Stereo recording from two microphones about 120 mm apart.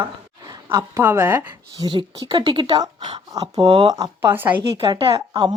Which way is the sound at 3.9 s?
30° right (ahead or behind).